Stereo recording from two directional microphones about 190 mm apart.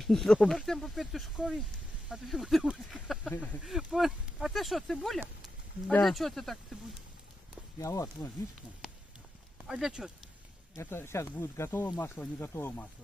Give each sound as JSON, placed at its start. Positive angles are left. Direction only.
{"t": 0.0, "sound": "speech", "side_deg": 0}
{"t": 7.8, "sound": "speech", "side_deg": 15}
{"t": 9.7, "sound": "speech", "side_deg": -5}
{"t": 10.8, "sound": "speech", "side_deg": 15}